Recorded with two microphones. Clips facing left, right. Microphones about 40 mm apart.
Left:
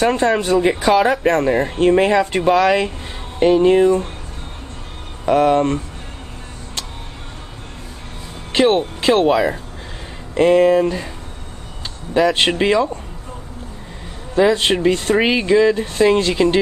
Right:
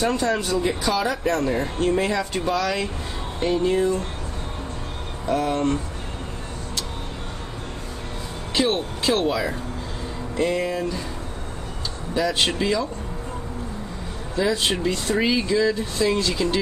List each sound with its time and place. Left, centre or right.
0.0 s speech: left
5.2 s speech: left
8.5 s speech: left
10.3 s speech: left
12.1 s speech: left
14.3 s speech: left